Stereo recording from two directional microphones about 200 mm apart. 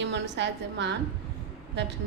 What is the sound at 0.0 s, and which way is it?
Speech, 60° right (ahead or behind).